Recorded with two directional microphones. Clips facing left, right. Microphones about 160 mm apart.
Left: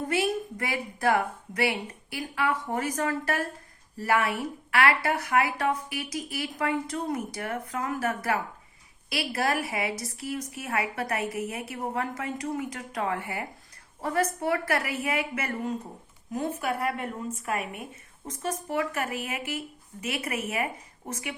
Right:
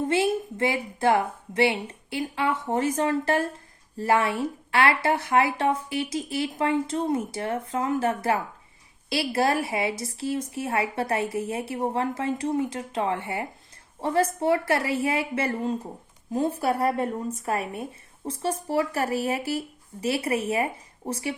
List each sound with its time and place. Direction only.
0.0 s speech: 25° right (ahead or behind)